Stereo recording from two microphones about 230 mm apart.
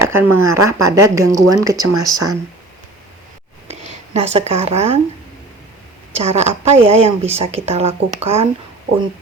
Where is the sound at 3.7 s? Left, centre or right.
Right.